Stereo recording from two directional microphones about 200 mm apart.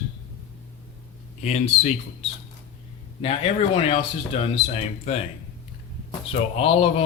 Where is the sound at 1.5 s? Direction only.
35° left (ahead or behind).